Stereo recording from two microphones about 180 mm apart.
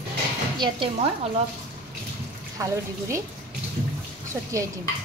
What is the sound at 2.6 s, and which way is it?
Speech, 20° right (ahead or behind).